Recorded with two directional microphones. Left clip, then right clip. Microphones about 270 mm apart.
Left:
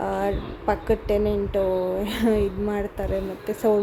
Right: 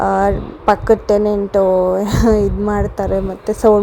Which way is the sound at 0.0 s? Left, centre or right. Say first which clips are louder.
Right 11 dB; right.